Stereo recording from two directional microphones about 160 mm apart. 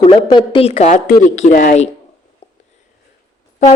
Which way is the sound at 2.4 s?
40° left (ahead or behind).